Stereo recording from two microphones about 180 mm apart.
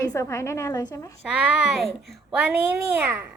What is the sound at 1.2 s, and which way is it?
A child's voice, 5° right (ahead or behind).